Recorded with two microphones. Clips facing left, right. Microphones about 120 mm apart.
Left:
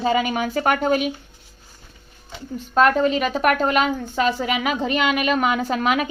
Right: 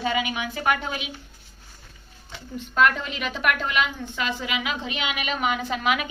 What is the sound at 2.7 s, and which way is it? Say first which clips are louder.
A woman's voice: left 6 dB; 40° left (ahead or behind).